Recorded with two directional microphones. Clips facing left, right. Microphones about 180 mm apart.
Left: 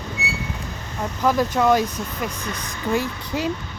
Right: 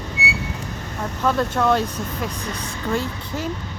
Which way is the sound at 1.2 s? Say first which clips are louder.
Left 1 dB; 10° left (ahead or behind).